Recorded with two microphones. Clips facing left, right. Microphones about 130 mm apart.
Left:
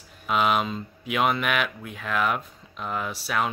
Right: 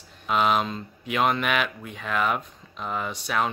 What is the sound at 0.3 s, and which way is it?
Speech, centre (ahead or behind).